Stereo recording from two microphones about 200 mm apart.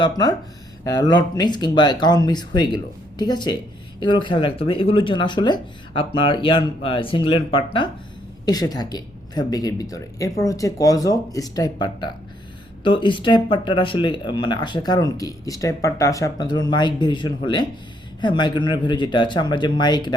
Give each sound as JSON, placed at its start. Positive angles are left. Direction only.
{"t": 0.0, "sound": "speech", "side_deg": 20}